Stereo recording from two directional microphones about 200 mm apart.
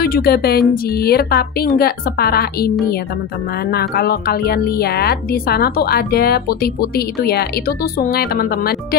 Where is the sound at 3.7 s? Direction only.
50° left (ahead or behind).